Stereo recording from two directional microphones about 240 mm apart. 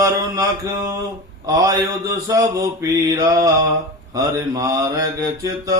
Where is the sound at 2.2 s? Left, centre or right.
Centre.